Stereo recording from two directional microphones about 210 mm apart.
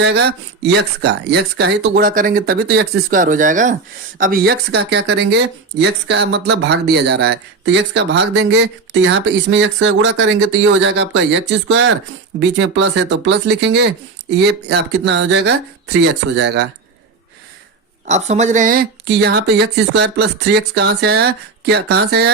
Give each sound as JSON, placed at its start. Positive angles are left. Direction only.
{"t": 0.0, "sound": "speech", "side_deg": -55}
{"t": 18.0, "sound": "speech", "side_deg": -35}